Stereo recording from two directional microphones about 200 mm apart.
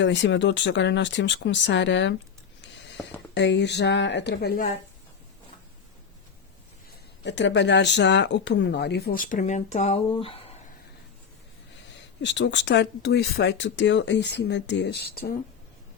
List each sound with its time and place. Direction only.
0.0 s speech: 65° left (ahead or behind)
3.0 s a sound: centre (ahead or behind)
3.3 s speech: 60° left (ahead or behind)
7.3 s speech: 65° left (ahead or behind); by 10.4 s 30° left (ahead or behind)
12.2 s speech: 60° left (ahead or behind)